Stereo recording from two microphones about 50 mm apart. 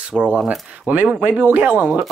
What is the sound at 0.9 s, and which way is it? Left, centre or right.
Speech, right.